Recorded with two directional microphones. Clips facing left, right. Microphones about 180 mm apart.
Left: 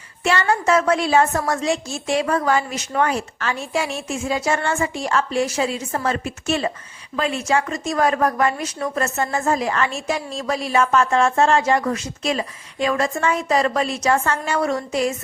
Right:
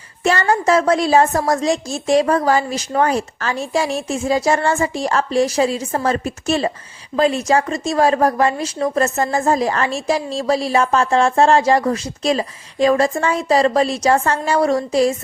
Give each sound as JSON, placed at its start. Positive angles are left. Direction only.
{"t": 0.2, "sound": "speech", "side_deg": -40}